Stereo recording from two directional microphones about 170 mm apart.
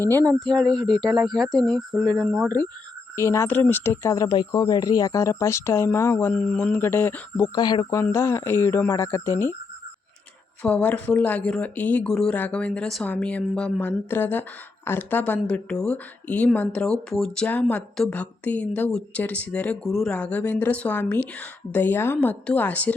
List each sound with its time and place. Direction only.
0.3 s speech: 5° left (ahead or behind)
3.2 s speech: 15° left (ahead or behind)
7.5 s speech: 25° left (ahead or behind)
10.6 s speech: 5° left (ahead or behind)